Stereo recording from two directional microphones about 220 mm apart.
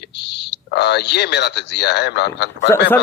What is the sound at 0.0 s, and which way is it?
A man's voice, 50° left (ahead or behind).